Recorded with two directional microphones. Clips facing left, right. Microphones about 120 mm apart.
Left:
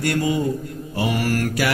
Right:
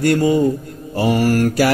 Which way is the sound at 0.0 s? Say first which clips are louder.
Right 7 dB; 35° right (ahead or behind).